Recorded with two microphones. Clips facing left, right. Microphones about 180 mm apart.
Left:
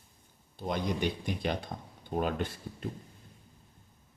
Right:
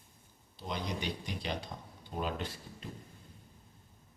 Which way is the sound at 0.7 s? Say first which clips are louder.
Left 6 dB; 50° left (ahead or behind).